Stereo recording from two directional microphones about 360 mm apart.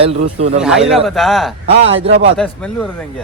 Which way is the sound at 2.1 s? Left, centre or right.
Right.